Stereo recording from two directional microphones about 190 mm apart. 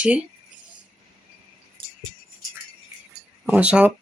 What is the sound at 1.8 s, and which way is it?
Music, 25° right (ahead or behind).